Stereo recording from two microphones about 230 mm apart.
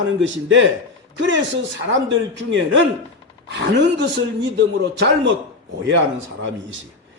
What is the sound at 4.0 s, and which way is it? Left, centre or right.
A man's voice, right.